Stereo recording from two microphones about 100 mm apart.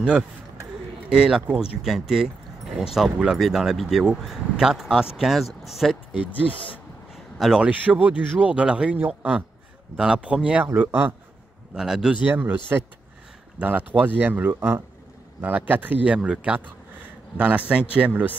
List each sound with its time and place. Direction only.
1.1 s speech: 10° right (ahead or behind)
7.3 s a man's voice: 5° right (ahead or behind); by 11.1 s 20° right (ahead or behind)
11.7 s a man's voice: 5° right (ahead or behind)